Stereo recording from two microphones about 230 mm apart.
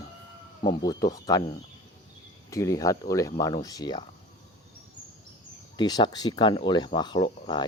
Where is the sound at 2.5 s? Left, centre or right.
Centre.